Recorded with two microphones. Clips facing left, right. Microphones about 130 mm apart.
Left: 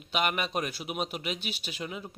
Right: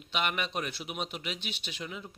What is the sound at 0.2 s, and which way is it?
Speech, 45° left (ahead or behind).